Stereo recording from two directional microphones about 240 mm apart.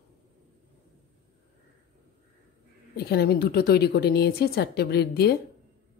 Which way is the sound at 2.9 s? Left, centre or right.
Left.